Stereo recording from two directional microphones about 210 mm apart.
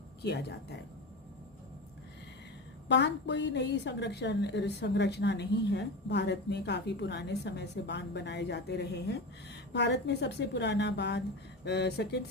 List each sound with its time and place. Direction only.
0.2 s speech: 50° left (ahead or behind)
2.9 s a woman's voice: 55° left (ahead or behind)